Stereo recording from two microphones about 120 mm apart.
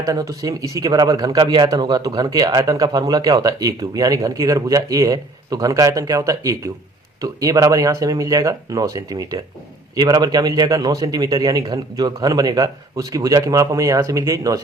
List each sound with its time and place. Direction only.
0.0 s a man's voice: 30° right (ahead or behind)